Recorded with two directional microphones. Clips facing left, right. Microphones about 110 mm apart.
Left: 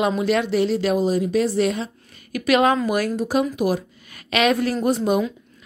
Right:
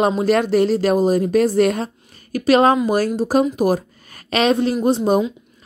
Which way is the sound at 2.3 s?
35° right (ahead or behind).